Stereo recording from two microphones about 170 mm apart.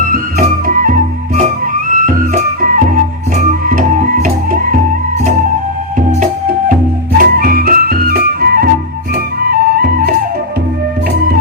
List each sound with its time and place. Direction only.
0.1 s music: 55° right (ahead or behind)
7.2 s music: 55° right (ahead or behind)